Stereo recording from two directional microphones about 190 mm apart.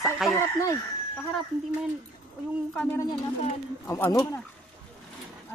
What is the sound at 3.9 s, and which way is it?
Speech, 10° left (ahead or behind).